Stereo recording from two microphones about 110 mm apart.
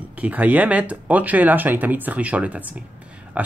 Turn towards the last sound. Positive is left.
turn(degrees=-15)  # may be behind; listen again after turning